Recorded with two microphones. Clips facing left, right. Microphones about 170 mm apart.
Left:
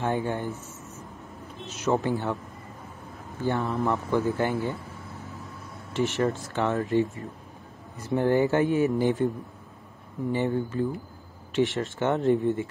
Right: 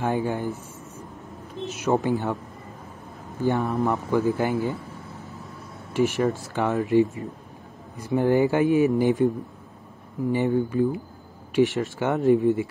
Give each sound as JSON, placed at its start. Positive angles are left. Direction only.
{"t": 0.0, "sound": "speech", "side_deg": -15}
{"t": 1.7, "sound": "speech", "side_deg": -15}
{"t": 3.3, "sound": "speech", "side_deg": -15}
{"t": 5.9, "sound": "speech", "side_deg": -10}
{"t": 10.3, "sound": "speech", "side_deg": -15}